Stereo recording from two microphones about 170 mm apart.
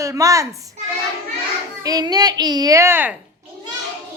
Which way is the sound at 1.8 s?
20° right (ahead or behind).